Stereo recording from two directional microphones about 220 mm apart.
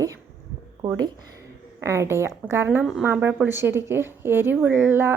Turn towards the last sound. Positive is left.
turn(degrees=-10)  # may be behind; listen again after turning